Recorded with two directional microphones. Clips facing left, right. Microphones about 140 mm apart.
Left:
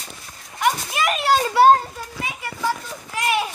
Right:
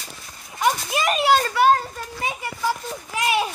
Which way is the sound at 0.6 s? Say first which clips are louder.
Even; 30° right (ahead or behind).